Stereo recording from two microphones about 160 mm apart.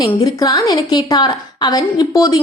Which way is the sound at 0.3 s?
20° left (ahead or behind).